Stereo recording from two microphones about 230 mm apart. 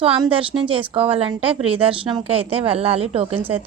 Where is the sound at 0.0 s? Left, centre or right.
Right.